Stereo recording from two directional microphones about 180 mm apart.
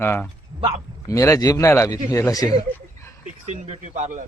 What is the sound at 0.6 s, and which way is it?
Speech, 30° right (ahead or behind).